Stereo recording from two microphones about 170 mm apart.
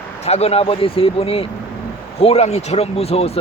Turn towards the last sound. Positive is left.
turn(degrees=35)  # may be behind; listen again after turning